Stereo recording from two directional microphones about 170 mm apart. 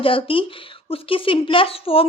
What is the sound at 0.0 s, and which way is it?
A woman's voice, 30° left (ahead or behind).